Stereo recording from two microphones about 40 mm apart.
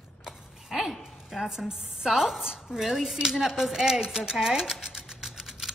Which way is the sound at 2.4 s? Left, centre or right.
Centre.